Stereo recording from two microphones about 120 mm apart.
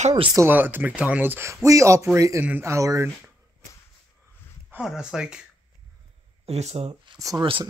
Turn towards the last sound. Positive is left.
turn(degrees=-30)  # may be behind; listen again after turning